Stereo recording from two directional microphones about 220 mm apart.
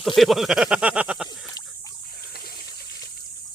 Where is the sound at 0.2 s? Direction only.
Centre (ahead or behind).